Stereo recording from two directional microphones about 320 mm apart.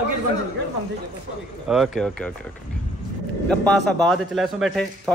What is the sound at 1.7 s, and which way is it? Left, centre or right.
Speech, centre.